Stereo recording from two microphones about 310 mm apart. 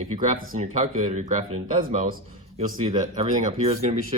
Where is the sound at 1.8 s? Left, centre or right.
Right.